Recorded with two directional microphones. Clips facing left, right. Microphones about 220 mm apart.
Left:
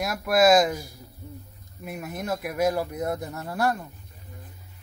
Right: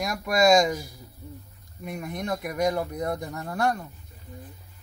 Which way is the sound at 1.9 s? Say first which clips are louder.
Even; 5° left (ahead or behind).